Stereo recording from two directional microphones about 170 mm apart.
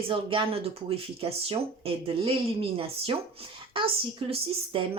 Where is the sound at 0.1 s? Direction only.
30° right (ahead or behind).